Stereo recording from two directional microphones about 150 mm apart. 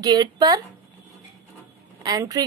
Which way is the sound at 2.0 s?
25° right (ahead or behind).